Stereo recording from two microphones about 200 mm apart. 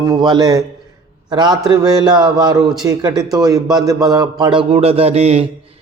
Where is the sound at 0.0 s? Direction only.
20° right (ahead or behind).